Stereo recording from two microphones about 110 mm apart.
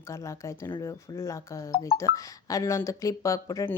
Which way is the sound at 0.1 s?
25° left (ahead or behind).